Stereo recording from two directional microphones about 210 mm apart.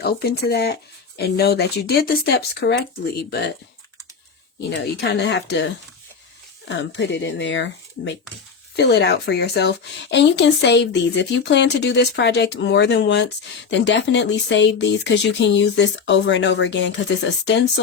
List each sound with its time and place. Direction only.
0.0 s speech: 50° left (ahead or behind)
4.7 s speech: 55° left (ahead or behind)